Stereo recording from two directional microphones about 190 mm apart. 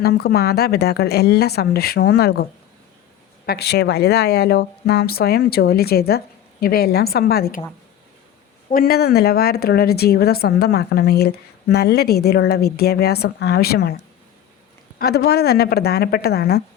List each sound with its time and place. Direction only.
0.0 s speech: 55° left (ahead or behind)
8.7 s speech: 55° left (ahead or behind)
14.9 s speech: 55° left (ahead or behind)